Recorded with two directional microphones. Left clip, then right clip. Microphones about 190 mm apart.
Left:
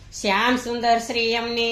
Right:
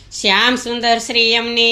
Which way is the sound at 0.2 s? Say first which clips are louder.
Right 6 dB; 30° right (ahead or behind).